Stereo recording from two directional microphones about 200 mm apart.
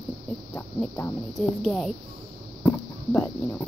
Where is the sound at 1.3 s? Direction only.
Centre (ahead or behind).